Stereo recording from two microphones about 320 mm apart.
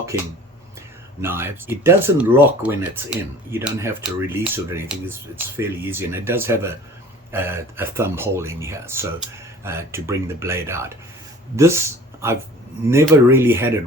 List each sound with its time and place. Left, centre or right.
0.1 s speech: centre